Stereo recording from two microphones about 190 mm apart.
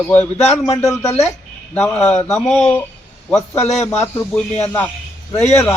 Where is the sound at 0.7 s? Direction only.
15° left (ahead or behind).